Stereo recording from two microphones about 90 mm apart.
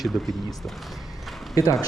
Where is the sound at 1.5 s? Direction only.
40° left (ahead or behind).